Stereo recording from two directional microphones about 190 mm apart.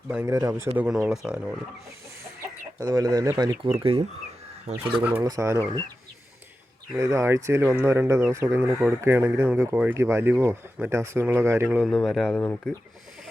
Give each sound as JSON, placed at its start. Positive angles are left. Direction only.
{"t": 0.1, "sound": "speech", "side_deg": -10}
{"t": 1.1, "sound": "speech", "side_deg": -5}
{"t": 2.7, "sound": "speech", "side_deg": -20}
{"t": 5.1, "sound": "speech", "side_deg": -15}
{"t": 6.9, "sound": "speech", "side_deg": -15}
{"t": 11.9, "sound": "speech", "side_deg": 0}